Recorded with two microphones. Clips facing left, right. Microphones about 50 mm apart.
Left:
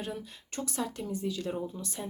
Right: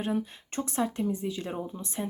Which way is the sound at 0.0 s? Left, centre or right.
Right.